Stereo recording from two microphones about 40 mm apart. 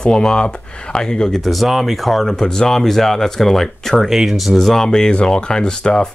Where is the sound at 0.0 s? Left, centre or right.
Left.